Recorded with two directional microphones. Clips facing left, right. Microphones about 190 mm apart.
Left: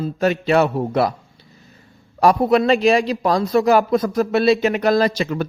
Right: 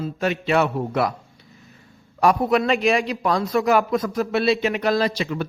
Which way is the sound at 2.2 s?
35° left (ahead or behind).